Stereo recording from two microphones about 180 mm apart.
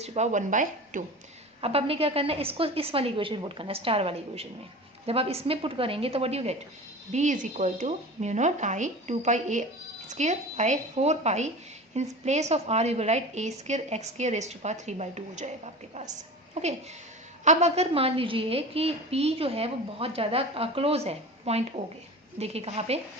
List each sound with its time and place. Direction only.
0.0 s speech: 40° right (ahead or behind)
1.6 s a woman's voice: 35° right (ahead or behind)